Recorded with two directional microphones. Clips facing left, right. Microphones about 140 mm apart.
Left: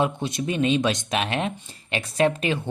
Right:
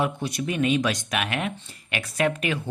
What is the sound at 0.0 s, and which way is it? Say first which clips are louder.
Speech: left 2 dB; 25° left (ahead or behind).